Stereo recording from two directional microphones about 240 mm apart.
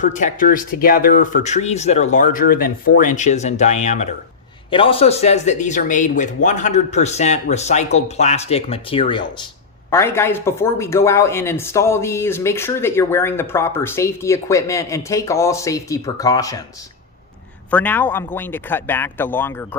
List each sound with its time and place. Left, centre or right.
0.0 s speech: left
9.9 s speech: centre
17.7 s speech: centre